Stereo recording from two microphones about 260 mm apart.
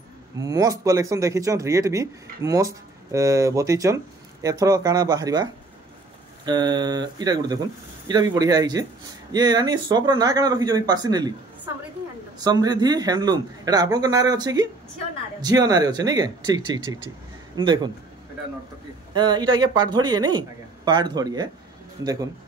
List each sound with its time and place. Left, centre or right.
0.4 s speech: centre
19.1 s speech: centre